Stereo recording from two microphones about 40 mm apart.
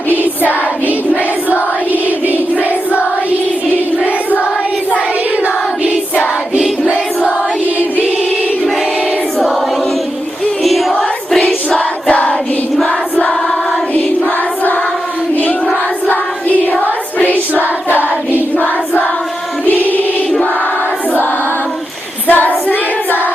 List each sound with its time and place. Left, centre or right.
10.6 s music: centre
16.8 s music: left
18.5 s choir: left
22.3 s child singing: left